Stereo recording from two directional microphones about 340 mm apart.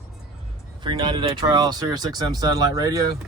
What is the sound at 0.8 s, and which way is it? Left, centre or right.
Speech, centre.